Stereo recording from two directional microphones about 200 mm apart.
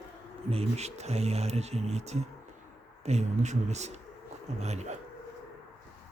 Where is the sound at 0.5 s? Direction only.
30° right (ahead or behind).